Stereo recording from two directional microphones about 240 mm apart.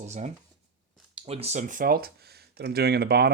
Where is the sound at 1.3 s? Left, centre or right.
Right.